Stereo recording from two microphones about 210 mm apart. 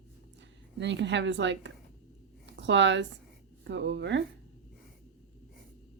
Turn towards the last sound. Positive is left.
turn(degrees=-60)  # may be behind; listen again after turning